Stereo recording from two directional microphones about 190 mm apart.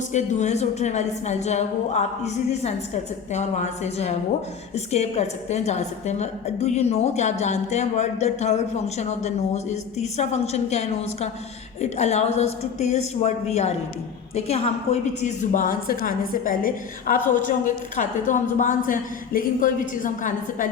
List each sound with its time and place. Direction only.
0.1 s a woman's voice: 40° left (ahead or behind)